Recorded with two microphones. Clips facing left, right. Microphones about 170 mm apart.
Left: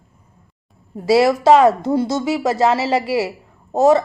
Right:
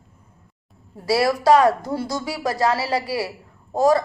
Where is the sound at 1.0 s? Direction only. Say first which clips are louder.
Left 6 dB; 20° left (ahead or behind).